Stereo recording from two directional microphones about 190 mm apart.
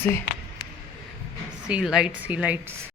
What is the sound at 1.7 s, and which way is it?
A woman's voice, 5° right (ahead or behind).